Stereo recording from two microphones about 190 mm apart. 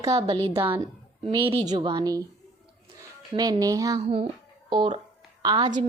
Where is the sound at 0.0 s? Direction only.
20° right (ahead or behind).